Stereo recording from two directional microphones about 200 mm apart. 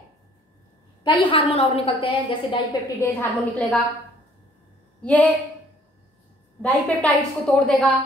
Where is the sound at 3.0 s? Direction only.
10° left (ahead or behind).